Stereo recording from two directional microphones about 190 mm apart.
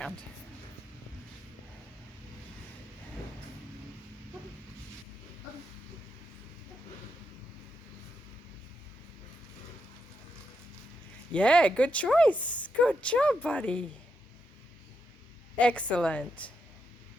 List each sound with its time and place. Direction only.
11.3 s speech: 5° left (ahead or behind)
15.5 s speech: 5° left (ahead or behind)